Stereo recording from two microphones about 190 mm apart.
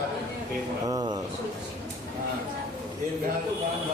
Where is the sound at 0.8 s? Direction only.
20° right (ahead or behind).